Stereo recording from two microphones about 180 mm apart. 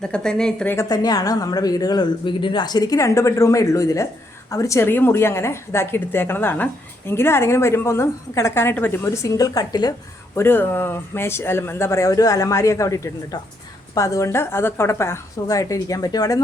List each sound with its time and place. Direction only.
0.0 s a woman's voice: 5° left (ahead or behind)
0.9 s a woman's voice: 20° left (ahead or behind)